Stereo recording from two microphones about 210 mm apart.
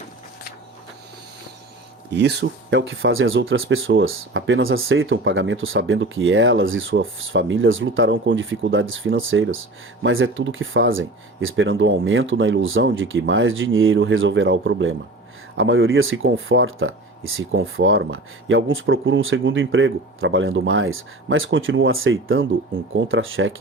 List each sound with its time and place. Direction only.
2.0 s speech: 55° right (ahead or behind)